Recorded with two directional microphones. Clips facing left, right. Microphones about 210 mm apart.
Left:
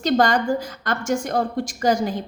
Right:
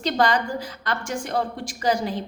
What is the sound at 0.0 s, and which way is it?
A woman's voice, 45° left (ahead or behind).